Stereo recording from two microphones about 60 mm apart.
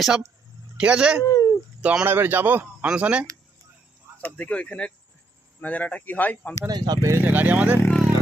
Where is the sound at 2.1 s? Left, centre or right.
Right.